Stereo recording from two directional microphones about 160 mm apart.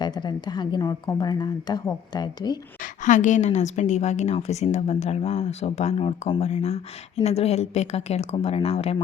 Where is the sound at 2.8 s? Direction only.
50° left (ahead or behind).